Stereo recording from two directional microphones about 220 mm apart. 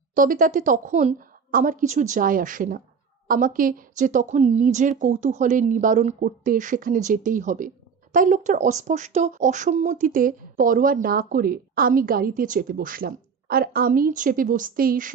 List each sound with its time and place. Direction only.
0.1 s speech: 40° right (ahead or behind)